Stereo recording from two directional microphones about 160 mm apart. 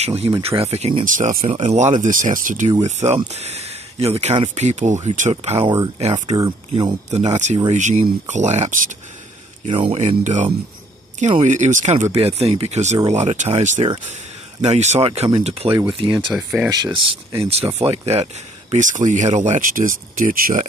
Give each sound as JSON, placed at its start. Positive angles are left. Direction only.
{"t": 0.0, "sound": "speech", "side_deg": -40}
{"t": 1.0, "sound": "speech", "side_deg": -55}
{"t": 2.8, "sound": "speech", "side_deg": -45}
{"t": 6.1, "sound": "speech", "side_deg": -25}
{"t": 7.1, "sound": "speech", "side_deg": -45}
{"t": 9.7, "sound": "speech", "side_deg": -35}
{"t": 16.3, "sound": "speech", "side_deg": -5}
{"t": 16.6, "sound": "speech", "side_deg": -25}
{"t": 17.3, "sound": "speech", "side_deg": -40}